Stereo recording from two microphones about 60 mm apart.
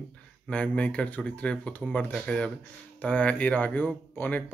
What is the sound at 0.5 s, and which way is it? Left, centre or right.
Speech, left.